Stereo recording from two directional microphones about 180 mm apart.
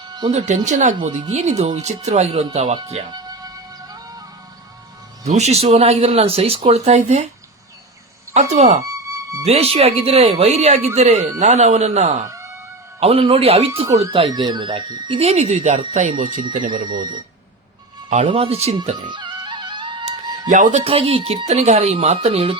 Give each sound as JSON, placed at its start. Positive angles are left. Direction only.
{"t": 0.1, "sound": "music", "side_deg": -25}
{"t": 0.3, "sound": "speech", "side_deg": -40}
{"t": 3.1, "sound": "music", "side_deg": -20}
{"t": 5.2, "sound": "speech", "side_deg": -35}
{"t": 8.3, "sound": "speech", "side_deg": -40}
{"t": 8.8, "sound": "music", "side_deg": -15}
{"t": 9.5, "sound": "speech", "side_deg": -35}
{"t": 16.7, "sound": "speech", "side_deg": -25}
{"t": 18.1, "sound": "speech", "side_deg": -35}
{"t": 18.9, "sound": "music", "side_deg": -25}
{"t": 20.5, "sound": "speech", "side_deg": -45}
{"t": 20.8, "sound": "speech", "side_deg": -30}